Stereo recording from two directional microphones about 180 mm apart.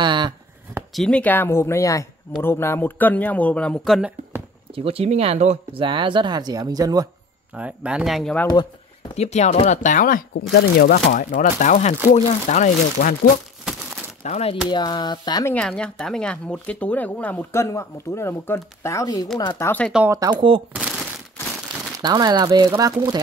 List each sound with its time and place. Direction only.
0.0 s a sound: 25° right (ahead or behind)
0.9 s speech: 5° left (ahead or behind)
4.7 s speech: 35° right (ahead or behind)
7.5 s speech: 5° right (ahead or behind)
9.1 s speech: 35° left (ahead or behind)
10.5 s speech: 65° left (ahead or behind)
11.1 s speech: 45° left (ahead or behind)
14.2 s speech: 35° left (ahead or behind)
14.7 s speech: 25° left (ahead or behind)
15.5 s speech: 5° left (ahead or behind)
20.1 s speech: 20° right (ahead or behind)
20.7 s a sound: 5° right (ahead or behind)
21.7 s crumpling: 25° right (ahead or behind)
22.0 s speech: 25° right (ahead or behind)